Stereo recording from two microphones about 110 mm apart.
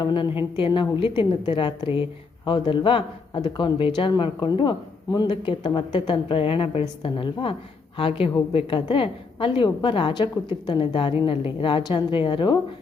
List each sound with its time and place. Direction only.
0.0 s a woman's voice: 45° left (ahead or behind)